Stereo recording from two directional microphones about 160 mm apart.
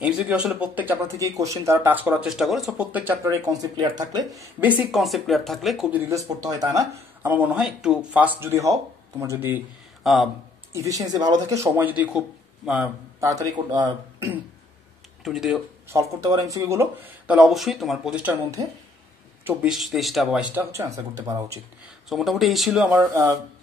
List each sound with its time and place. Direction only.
0.0 s speech: 5° right (ahead or behind)
3.3 s speech: 25° right (ahead or behind)
4.4 s speech: 10° right (ahead or behind)
7.2 s speech: 10° right (ahead or behind)
10.0 s speech: centre (ahead or behind)
10.7 s speech: 20° right (ahead or behind)
13.3 s speech: 25° right (ahead or behind)
15.2 s speech: centre (ahead or behind)
15.9 s speech: 20° right (ahead or behind); by 18.3 s 5° right (ahead or behind)
19.4 s speech: 15° right (ahead or behind)
19.7 s speech: centre (ahead or behind)
20.5 s speech: 20° right (ahead or behind)
22.1 s speech: centre (ahead or behind)
22.9 s speech: 20° right (ahead or behind)